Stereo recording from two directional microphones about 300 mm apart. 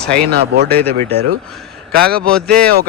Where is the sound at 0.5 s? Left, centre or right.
Right.